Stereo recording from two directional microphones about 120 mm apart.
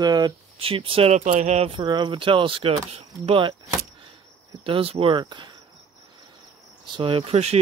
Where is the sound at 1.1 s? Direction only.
90° right.